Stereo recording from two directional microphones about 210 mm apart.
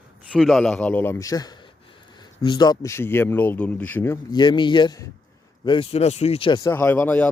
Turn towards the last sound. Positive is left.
turn(degrees=10)  # may be behind; listen again after turning